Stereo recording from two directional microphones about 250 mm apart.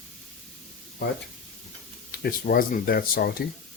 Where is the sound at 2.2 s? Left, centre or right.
Left.